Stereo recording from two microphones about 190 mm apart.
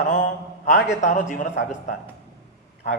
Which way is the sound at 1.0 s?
40° left (ahead or behind).